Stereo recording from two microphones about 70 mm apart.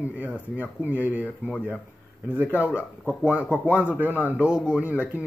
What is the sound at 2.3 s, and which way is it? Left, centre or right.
Speech, right.